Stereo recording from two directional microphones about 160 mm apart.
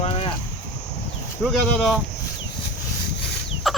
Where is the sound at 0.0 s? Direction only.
35° left (ahead or behind).